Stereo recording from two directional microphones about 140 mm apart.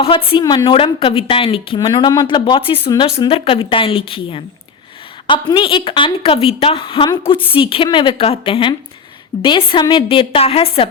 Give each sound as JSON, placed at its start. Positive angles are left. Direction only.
{"t": 0.0, "sound": "a woman's voice", "side_deg": 40}